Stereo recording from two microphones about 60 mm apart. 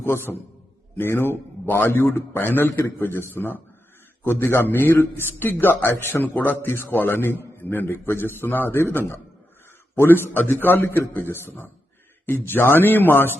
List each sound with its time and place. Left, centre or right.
0.0 s a man's voice: left